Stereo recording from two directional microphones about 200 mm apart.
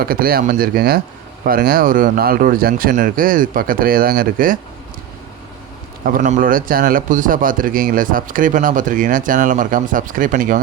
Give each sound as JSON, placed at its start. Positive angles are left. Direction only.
{"t": 0.0, "sound": "speech", "side_deg": -45}
{"t": 6.1, "sound": "speech", "side_deg": -40}